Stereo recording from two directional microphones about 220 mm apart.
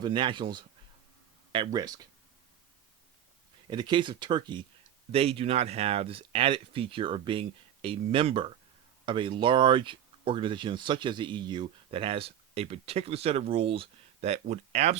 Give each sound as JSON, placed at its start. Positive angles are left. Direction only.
{"t": 0.0, "sound": "speech", "side_deg": -20}
{"t": 3.7, "sound": "speech", "side_deg": -20}